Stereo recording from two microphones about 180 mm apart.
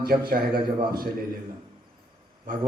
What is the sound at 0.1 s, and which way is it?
Speech, 55° right (ahead or behind).